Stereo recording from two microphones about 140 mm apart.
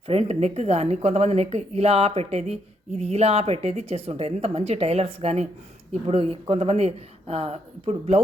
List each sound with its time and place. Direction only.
0.1 s speech: 50° right (ahead or behind)